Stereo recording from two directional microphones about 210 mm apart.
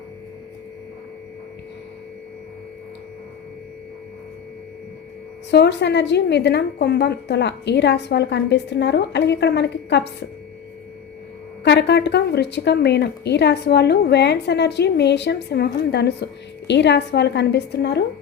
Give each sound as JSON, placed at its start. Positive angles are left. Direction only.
{"t": 5.5, "sound": "a woman's voice", "side_deg": 55}
{"t": 11.6, "sound": "a woman's voice", "side_deg": 55}